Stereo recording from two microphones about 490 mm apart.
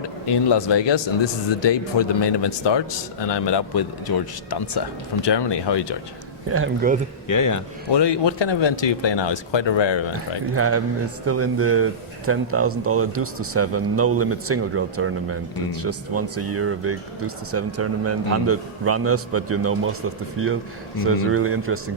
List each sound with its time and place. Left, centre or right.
0.0 s a man's voice: left
6.5 s speech: right
7.3 s speech: left
7.9 s speech: left
10.5 s speech: right